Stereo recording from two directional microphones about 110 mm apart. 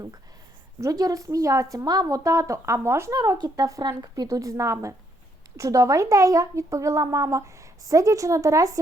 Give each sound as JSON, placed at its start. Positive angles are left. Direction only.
{"t": 0.8, "sound": "a woman's voice", "side_deg": -35}